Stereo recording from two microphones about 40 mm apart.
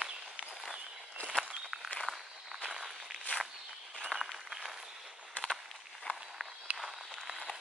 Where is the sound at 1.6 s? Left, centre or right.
Centre.